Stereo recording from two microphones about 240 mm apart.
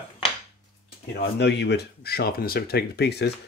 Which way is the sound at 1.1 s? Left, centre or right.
Left.